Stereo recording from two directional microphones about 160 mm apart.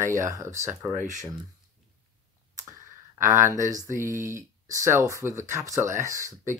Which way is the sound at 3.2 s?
20° right (ahead or behind).